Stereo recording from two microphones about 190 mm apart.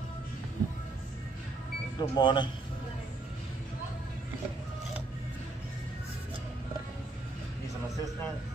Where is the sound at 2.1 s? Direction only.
25° left (ahead or behind).